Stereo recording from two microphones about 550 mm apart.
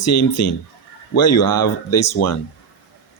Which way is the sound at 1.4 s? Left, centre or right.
Left.